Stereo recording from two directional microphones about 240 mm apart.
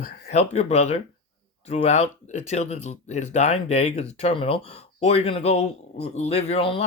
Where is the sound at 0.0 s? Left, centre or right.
Left.